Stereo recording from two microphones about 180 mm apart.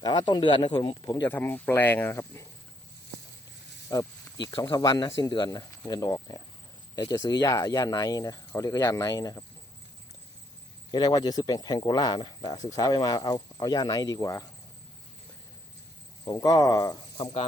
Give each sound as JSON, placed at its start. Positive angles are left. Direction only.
{"t": 0.0, "sound": "speech", "side_deg": 20}
{"t": 3.8, "sound": "speech", "side_deg": 20}
{"t": 10.9, "sound": "speech", "side_deg": 20}
{"t": 16.2, "sound": "speech", "side_deg": 20}
{"t": 17.2, "sound": "speech", "side_deg": 35}